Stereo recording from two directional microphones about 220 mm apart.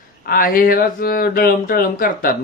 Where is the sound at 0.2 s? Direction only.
40° left (ahead or behind).